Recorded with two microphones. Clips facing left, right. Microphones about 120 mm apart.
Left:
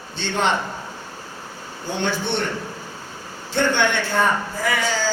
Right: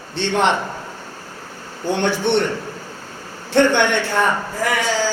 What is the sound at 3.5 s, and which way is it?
Speech, 70° right (ahead or behind).